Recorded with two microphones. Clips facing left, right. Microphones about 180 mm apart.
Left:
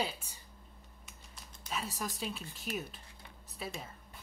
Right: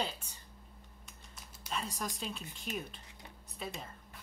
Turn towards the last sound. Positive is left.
turn(degrees=5)  # may be behind; listen again after turning